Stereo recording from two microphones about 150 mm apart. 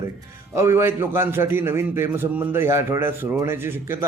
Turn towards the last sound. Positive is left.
turn(degrees=-15)  # may be behind; listen again after turning